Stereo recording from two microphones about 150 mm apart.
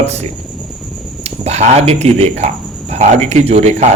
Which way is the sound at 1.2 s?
45° right (ahead or behind).